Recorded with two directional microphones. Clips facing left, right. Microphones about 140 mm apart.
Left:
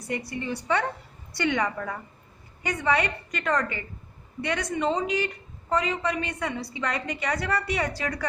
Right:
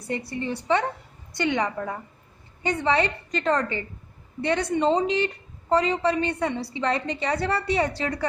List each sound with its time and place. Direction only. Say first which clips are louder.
0.3 s a woman's voice: right 4 dB; 30° right (ahead or behind)